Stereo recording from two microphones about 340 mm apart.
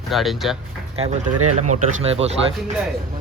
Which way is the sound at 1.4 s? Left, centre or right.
Right.